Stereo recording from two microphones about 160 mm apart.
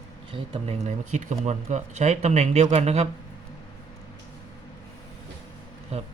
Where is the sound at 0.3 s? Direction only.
30° right (ahead or behind).